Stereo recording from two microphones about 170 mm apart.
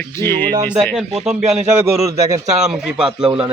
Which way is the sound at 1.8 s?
20° right (ahead or behind).